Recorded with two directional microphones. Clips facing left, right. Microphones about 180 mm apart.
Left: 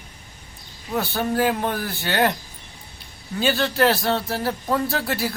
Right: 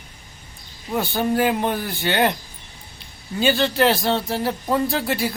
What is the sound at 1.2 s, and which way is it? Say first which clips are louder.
Speech: right 2 dB; centre (ahead or behind).